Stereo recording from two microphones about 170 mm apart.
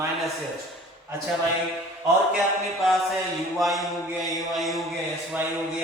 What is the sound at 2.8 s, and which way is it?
Music, centre (ahead or behind).